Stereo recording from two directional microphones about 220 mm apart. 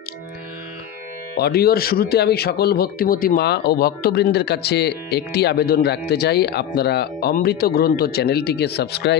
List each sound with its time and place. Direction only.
1.4 s a man's voice: 45° left (ahead or behind)